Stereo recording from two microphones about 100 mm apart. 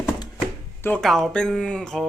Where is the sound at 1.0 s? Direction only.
5° left (ahead or behind).